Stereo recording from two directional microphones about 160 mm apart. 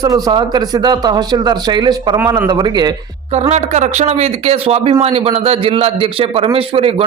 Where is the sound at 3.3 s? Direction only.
40° right (ahead or behind).